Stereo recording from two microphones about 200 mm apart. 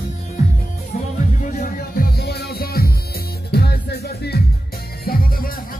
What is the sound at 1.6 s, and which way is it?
Music, 50° left (ahead or behind).